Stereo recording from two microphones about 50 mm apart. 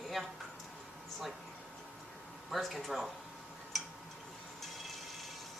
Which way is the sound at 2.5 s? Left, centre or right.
Centre.